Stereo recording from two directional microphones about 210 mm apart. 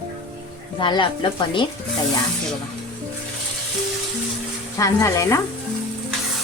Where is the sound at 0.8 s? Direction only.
25° left (ahead or behind).